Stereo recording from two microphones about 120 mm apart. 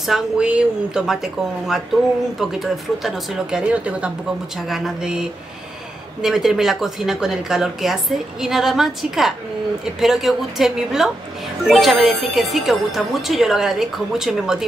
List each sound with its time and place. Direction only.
0.0 s a woman's voice: 5° right (ahead or behind)